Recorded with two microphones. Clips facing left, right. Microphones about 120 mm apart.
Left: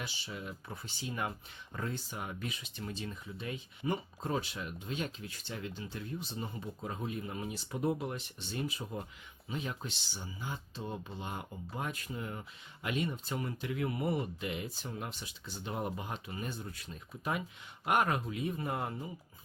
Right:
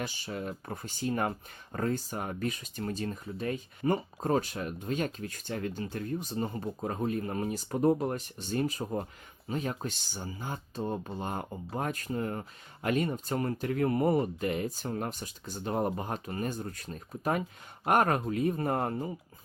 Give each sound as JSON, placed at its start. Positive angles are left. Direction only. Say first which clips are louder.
{"t": 0.0, "sound": "speech", "louder": "right 7 dB", "side_deg": -45}